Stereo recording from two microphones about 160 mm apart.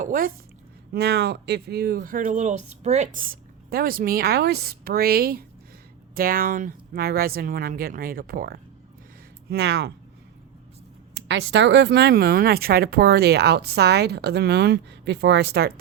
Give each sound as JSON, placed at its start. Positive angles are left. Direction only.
{"t": 0.0, "sound": "speech", "side_deg": -60}
{"t": 0.9, "sound": "speech", "side_deg": -90}
{"t": 9.5, "sound": "speech", "side_deg": -90}
{"t": 11.3, "sound": "speech", "side_deg": -90}